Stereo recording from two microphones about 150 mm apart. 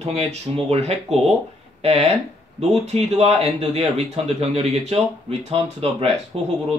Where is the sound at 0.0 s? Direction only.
45° right (ahead or behind).